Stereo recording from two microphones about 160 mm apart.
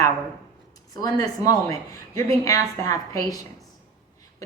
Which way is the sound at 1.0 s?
20° left (ahead or behind).